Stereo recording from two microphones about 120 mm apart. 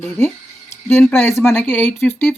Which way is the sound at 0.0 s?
15° left (ahead or behind).